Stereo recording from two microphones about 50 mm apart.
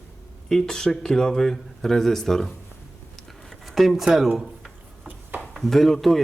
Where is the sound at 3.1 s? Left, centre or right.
Centre.